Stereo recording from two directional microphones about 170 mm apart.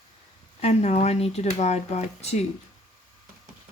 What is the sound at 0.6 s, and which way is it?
Speech, 40° left (ahead or behind).